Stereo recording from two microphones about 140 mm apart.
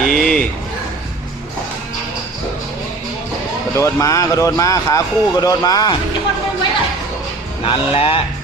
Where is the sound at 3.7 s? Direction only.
20° left (ahead or behind).